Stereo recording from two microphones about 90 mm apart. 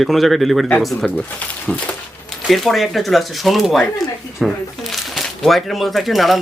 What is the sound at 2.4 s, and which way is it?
A man's voice, centre (ahead or behind).